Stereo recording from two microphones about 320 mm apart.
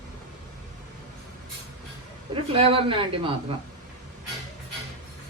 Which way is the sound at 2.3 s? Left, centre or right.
Centre.